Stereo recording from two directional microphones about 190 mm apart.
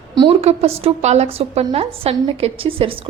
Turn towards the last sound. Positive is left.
turn(degrees=-30)  # may be behind; listen again after turning